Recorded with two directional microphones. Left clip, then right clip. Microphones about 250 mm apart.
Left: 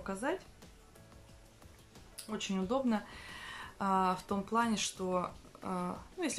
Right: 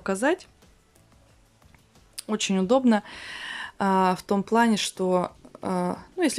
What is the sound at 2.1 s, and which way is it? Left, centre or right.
Speech, right.